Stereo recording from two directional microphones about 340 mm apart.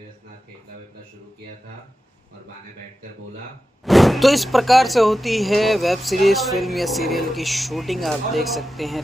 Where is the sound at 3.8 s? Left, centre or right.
Centre.